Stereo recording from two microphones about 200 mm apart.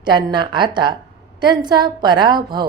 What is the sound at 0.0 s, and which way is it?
A woman's voice, 20° right (ahead or behind).